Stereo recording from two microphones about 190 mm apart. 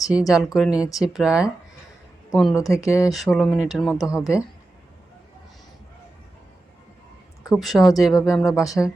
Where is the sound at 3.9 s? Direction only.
20° left (ahead or behind).